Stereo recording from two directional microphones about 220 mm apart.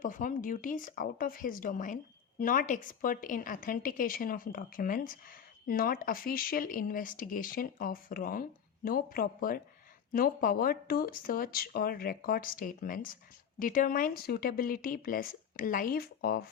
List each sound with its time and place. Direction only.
0.0 s speech: 35° left (ahead or behind)